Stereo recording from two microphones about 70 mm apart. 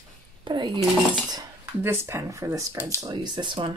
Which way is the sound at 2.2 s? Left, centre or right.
Right.